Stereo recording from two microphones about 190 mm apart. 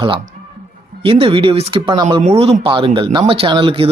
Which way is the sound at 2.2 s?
30° right (ahead or behind).